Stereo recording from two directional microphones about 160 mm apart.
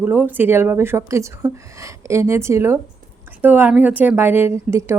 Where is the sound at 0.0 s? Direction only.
10° right (ahead or behind).